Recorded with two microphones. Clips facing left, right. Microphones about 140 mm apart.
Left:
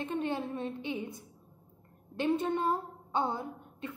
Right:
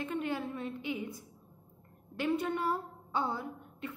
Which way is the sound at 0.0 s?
30° left (ahead or behind).